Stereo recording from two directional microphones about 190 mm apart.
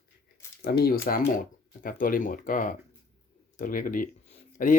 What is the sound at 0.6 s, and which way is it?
Speech, 55° left (ahead or behind).